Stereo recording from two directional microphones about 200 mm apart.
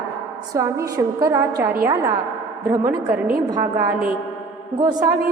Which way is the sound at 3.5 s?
20° right (ahead or behind).